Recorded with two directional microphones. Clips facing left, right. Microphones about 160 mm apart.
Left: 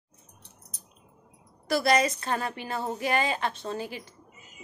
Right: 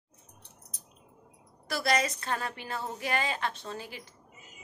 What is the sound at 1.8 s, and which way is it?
A woman's voice, 5° left (ahead or behind).